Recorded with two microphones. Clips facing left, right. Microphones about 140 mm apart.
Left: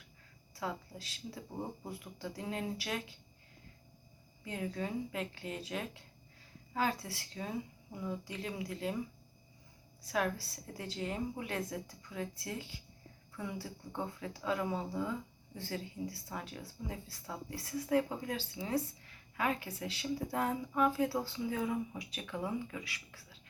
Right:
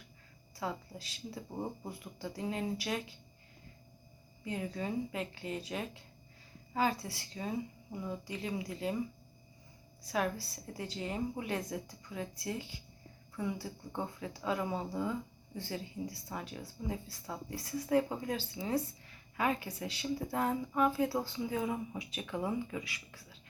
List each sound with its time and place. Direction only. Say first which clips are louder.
0.5 s speech: right 1 dB; centre (ahead or behind)
4.4 s speech: right 1 dB; 5° right (ahead or behind)
10.1 s speech: even; 5° right (ahead or behind)